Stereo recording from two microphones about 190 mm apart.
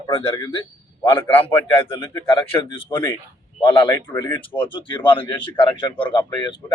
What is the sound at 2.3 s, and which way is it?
Speech, 30° left (ahead or behind).